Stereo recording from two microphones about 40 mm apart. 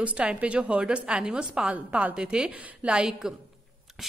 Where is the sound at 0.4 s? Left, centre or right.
Right.